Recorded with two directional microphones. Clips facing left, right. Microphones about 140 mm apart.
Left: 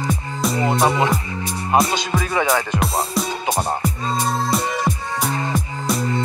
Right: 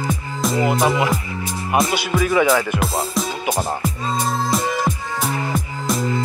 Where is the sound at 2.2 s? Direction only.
35° left (ahead or behind).